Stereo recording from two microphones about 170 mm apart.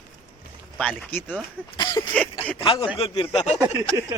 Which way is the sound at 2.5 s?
30° left (ahead or behind).